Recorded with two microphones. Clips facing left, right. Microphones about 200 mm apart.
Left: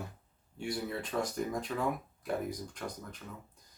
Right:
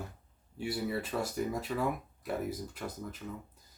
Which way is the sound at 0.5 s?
5° right (ahead or behind).